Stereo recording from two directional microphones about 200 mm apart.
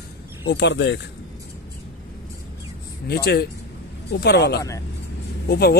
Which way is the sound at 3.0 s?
55° left (ahead or behind).